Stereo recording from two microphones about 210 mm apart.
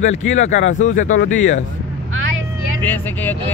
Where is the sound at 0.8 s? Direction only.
35° left (ahead or behind).